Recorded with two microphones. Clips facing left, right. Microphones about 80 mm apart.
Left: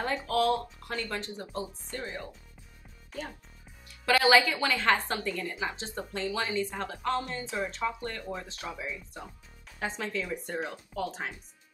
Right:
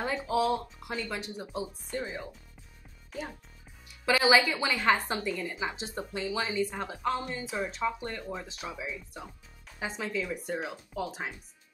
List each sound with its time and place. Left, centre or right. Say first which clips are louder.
0.0 s a woman's voice: left 1 dB; centre
4.0 s a woman's voice: left 1 dB; centre